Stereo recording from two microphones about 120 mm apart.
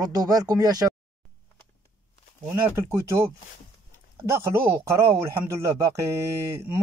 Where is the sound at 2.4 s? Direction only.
20° right (ahead or behind).